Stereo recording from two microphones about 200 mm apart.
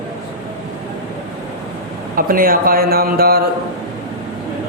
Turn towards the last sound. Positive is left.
turn(degrees=-50)  # may be behind; listen again after turning